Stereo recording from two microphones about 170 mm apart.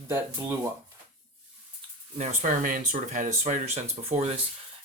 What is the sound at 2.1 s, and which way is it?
Speech, 45° right (ahead or behind).